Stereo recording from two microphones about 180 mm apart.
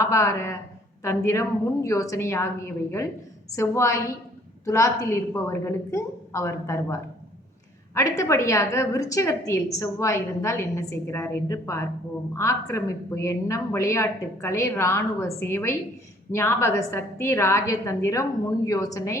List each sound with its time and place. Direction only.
0.0 s a woman's voice: 15° left (ahead or behind)